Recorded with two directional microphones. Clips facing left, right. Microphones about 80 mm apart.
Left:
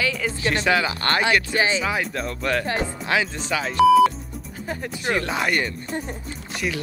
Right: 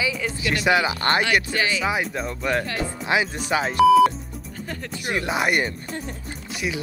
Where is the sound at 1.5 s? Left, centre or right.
Left.